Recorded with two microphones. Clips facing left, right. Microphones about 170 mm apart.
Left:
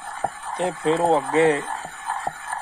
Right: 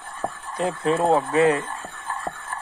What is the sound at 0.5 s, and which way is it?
Speech, 25° left (ahead or behind).